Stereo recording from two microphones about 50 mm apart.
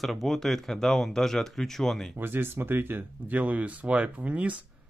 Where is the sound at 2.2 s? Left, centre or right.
Right.